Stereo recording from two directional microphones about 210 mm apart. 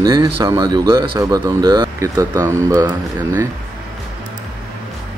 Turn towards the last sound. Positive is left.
turn(degrees=-15)  # may be behind; listen again after turning